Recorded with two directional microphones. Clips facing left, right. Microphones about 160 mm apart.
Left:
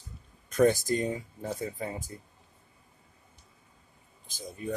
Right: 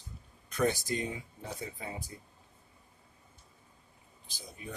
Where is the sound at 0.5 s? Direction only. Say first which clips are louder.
Left 7 dB; 45° left (ahead or behind).